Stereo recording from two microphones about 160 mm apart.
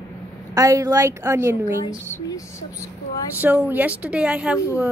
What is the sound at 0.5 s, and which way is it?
A woman's voice, 20° right (ahead or behind).